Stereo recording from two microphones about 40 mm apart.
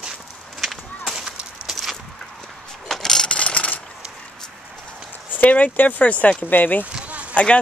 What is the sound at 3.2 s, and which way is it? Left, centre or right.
Mechanisms, left.